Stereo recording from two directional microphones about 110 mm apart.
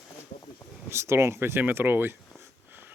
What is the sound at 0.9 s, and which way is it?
Speech, 25° right (ahead or behind).